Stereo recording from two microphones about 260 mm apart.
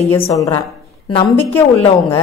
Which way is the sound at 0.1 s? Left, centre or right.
Centre.